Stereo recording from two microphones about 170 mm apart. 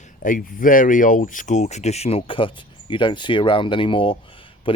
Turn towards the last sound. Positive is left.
turn(degrees=30)  # may be behind; listen again after turning